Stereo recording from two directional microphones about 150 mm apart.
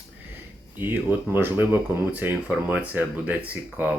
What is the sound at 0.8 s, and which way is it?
Speech, 15° right (ahead or behind).